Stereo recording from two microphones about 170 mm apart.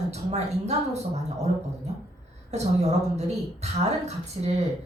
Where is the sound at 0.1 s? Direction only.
40° right (ahead or behind).